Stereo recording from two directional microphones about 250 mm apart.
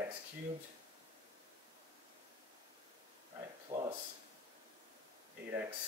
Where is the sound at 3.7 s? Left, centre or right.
Centre.